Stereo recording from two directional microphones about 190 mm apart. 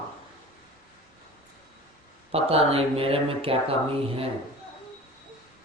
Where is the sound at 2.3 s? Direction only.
30° right (ahead or behind).